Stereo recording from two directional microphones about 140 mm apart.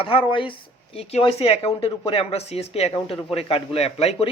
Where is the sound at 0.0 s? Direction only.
40° left (ahead or behind).